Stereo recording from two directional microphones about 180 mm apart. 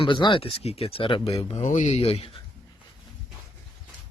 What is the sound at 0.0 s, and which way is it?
Speech, 25° left (ahead or behind).